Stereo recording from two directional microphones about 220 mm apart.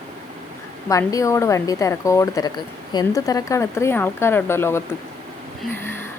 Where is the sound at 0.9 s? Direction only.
15° left (ahead or behind).